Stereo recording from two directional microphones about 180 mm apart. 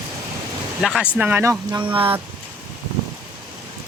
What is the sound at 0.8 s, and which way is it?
Speech, 5° right (ahead or behind).